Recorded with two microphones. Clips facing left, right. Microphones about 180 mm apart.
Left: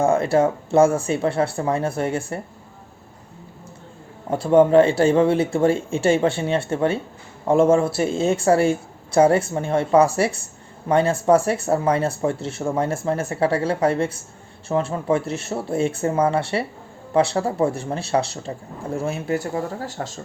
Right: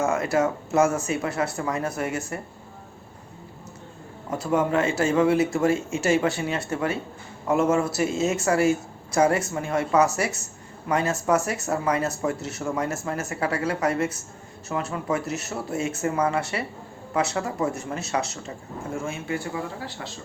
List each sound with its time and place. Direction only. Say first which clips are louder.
0.0 s speech: left 5 dB; 30° left (ahead or behind)
4.3 s speech: left 8 dB; 30° left (ahead or behind)